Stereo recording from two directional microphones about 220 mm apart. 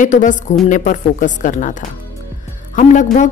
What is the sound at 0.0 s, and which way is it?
Speech, 35° left (ahead or behind).